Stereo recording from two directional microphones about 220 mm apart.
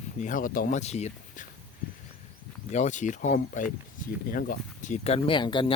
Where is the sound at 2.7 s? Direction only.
35° left (ahead or behind).